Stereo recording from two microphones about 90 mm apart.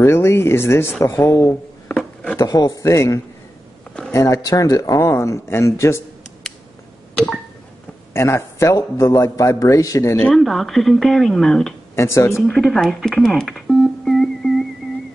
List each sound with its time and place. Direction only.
0.0 s speech: 30° left (ahead or behind)
1.5 s a sound: 15° left (ahead or behind)
2.4 s speech: 45° left (ahead or behind)
8.1 s speech: 30° left (ahead or behind)
10.3 s speech: centre (ahead or behind)
11.9 s speech: 30° left (ahead or behind)
12.4 s music: 10° left (ahead or behind)